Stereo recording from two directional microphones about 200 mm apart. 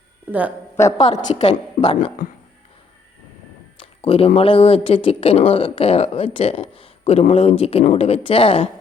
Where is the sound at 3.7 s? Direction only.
30° left (ahead or behind).